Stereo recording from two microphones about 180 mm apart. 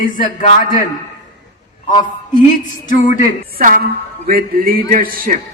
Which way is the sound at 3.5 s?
50° right (ahead or behind).